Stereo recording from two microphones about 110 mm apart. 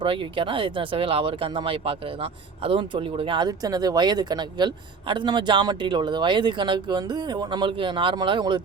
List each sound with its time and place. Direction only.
0.0 s speech: 50° right (ahead or behind)